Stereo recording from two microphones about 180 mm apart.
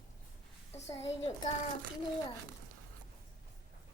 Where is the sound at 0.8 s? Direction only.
35° left (ahead or behind).